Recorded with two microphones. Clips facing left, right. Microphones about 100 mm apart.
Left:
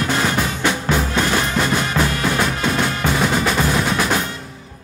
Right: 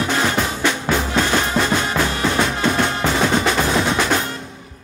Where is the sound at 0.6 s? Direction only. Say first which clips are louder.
Even; 10° left (ahead or behind).